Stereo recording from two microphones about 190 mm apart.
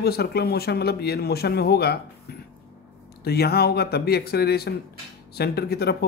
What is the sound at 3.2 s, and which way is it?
Speech, 55° left (ahead or behind).